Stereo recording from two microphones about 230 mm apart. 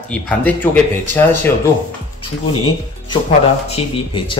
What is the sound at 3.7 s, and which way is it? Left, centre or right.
Speech, left.